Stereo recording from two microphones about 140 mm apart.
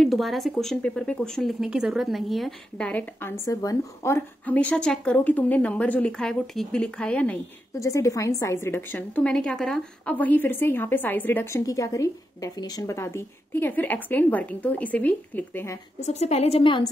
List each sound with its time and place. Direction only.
0.0 s speech: centre (ahead or behind)
2.9 s a woman's voice: 15° left (ahead or behind)
7.8 s a woman's voice: 20° left (ahead or behind)
16.0 s a woman's voice: 50° left (ahead or behind)